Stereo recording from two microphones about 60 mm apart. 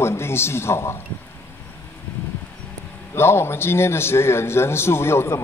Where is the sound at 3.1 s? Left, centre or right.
Left.